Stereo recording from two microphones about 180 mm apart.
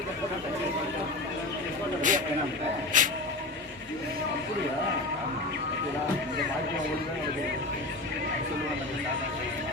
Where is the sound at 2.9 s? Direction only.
45° right (ahead or behind).